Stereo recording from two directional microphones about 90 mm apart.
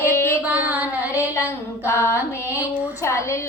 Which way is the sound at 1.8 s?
30° left (ahead or behind).